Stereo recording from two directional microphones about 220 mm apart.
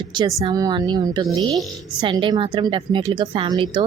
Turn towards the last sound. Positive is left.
turn(degrees=-20)  # may be behind; listen again after turning